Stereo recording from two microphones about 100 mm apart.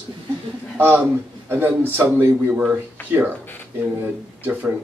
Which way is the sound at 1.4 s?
20° right (ahead or behind).